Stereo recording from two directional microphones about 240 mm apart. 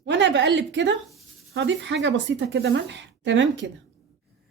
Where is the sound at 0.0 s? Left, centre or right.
Right.